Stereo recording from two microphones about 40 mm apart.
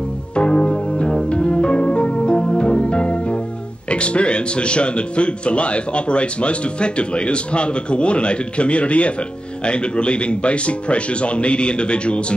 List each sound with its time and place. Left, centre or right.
0.4 s music: left
3.9 s speech: left